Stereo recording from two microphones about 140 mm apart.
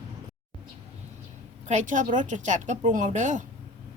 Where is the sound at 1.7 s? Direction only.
60° right (ahead or behind).